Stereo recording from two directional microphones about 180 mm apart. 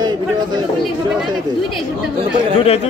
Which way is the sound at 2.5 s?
35° left (ahead or behind).